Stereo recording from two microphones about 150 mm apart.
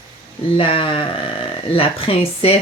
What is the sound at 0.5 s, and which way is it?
Speech, 35° left (ahead or behind).